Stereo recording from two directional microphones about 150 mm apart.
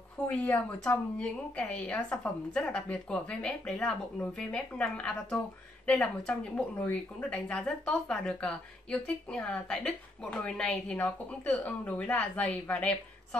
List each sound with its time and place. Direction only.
0.4 s speech: 10° left (ahead or behind)